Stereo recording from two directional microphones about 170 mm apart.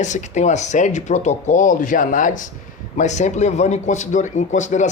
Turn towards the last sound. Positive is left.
turn(degrees=45)  # may be behind; listen again after turning